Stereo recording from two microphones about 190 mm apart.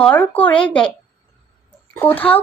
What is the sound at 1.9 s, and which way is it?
Speech, 10° left (ahead or behind).